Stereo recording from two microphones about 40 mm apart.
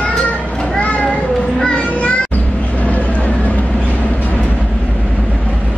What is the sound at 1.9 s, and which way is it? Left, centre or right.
Music, left.